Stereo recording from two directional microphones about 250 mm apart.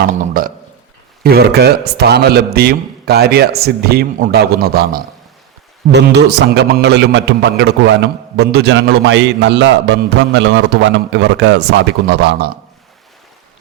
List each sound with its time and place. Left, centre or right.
1.2 s a man's voice: right